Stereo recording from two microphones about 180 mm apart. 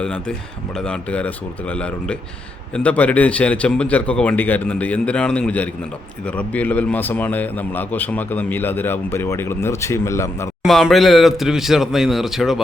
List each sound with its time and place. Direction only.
0.0 s a man's voice: 5° left (ahead or behind)
10.6 s speech: centre (ahead or behind)